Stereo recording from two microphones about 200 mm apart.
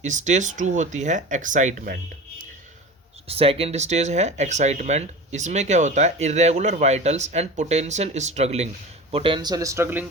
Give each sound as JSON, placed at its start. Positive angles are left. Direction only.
{"t": 0.0, "sound": "speech", "side_deg": -35}
{"t": 3.2, "sound": "speech", "side_deg": -30}